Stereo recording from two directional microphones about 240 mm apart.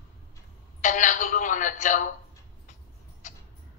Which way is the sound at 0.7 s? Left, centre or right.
Left.